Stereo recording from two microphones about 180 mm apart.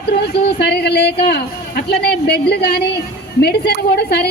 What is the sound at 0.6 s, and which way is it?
A woman's voice, 65° left (ahead or behind).